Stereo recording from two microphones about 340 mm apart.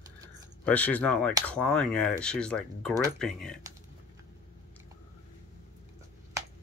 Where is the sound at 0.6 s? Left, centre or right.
Centre.